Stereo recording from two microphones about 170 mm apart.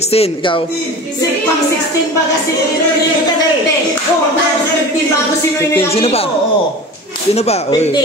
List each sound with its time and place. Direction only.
0.1 s a man's voice: 35° left (ahead or behind)
5.9 s a man's voice: 35° left (ahead or behind)
7.3 s a man's voice: 40° left (ahead or behind)